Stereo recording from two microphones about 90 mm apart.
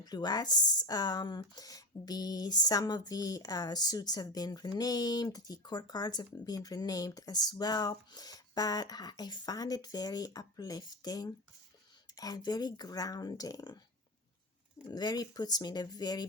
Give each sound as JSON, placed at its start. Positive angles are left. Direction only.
{"t": 0.0, "sound": "speech", "side_deg": 50}
{"t": 14.8, "sound": "speech", "side_deg": 45}